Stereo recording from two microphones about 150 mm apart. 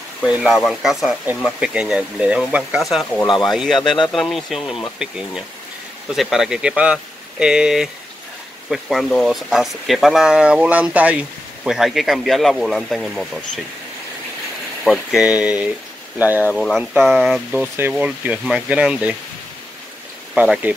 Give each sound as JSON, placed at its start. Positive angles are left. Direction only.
{"t": 0.3, "sound": "speech", "side_deg": -5}
{"t": 3.3, "sound": "speech", "side_deg": 30}
{"t": 3.5, "sound": "speech", "side_deg": 0}
{"t": 14.9, "sound": "speech", "side_deg": 0}
{"t": 16.5, "sound": "speech", "side_deg": 0}
{"t": 20.3, "sound": "speech", "side_deg": -10}